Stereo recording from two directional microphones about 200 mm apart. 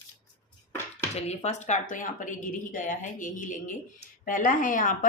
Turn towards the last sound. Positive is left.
turn(degrees=40)  # may be behind; listen again after turning